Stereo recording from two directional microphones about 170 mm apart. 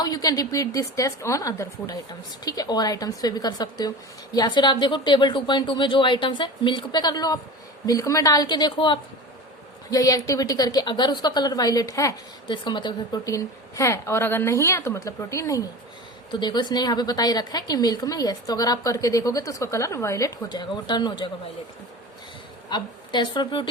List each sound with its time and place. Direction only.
0.0 s a woman's voice: 20° left (ahead or behind)
22.7 s a woman's voice: 25° left (ahead or behind)